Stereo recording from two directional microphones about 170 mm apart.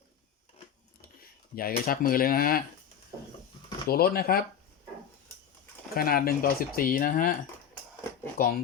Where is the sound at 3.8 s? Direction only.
60° left (ahead or behind).